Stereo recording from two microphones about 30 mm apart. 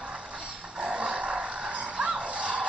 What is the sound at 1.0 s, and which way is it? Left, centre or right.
Vehicle, right.